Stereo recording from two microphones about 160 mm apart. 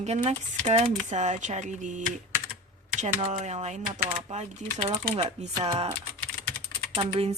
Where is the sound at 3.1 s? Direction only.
45° right (ahead or behind).